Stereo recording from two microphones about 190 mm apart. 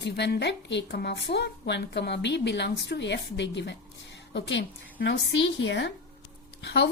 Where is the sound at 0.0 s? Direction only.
65° left (ahead or behind).